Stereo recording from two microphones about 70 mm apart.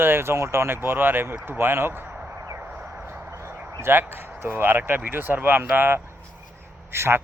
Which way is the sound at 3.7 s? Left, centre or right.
Right.